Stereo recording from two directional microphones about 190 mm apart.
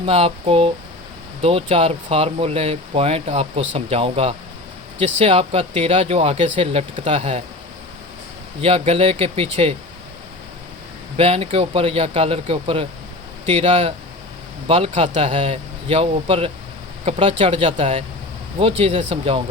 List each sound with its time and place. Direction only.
0.0 s speech: 30° right (ahead or behind)
8.6 s speech: 30° right (ahead or behind)
11.2 s speech: 30° right (ahead or behind)